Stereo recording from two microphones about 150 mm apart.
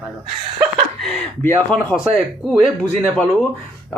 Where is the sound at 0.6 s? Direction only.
Centre (ahead or behind).